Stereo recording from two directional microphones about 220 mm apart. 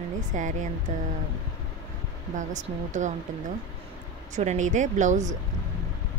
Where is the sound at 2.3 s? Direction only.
35° right (ahead or behind).